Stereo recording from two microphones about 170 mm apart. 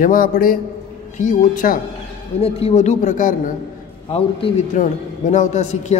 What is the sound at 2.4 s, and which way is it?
A man's voice, 40° left (ahead or behind).